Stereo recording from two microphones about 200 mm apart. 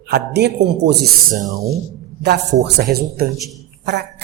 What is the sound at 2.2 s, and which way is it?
A man's voice, 55° right (ahead or behind).